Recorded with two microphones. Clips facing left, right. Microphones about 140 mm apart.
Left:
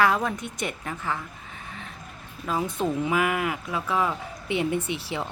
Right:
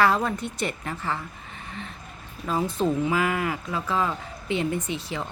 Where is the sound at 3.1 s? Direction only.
10° left (ahead or behind).